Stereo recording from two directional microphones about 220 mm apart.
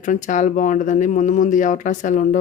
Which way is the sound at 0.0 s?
35° left (ahead or behind).